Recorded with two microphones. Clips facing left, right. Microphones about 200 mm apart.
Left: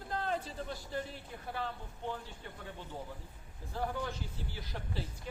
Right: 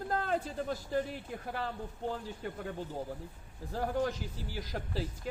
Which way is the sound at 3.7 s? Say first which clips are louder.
Right 5 dB; 40° right (ahead or behind).